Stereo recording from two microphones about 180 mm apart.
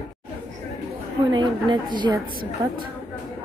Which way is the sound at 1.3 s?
25° right (ahead or behind).